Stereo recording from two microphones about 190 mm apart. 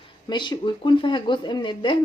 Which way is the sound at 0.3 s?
25° left (ahead or behind).